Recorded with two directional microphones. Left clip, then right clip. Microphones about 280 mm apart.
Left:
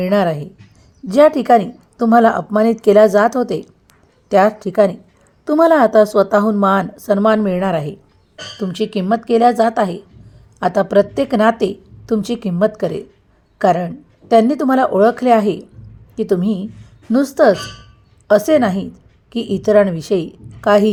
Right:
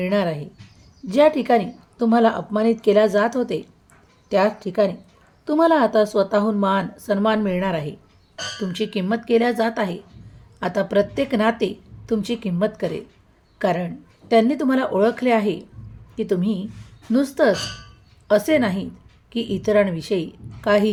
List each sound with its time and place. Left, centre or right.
0.0 s a woman's voice: centre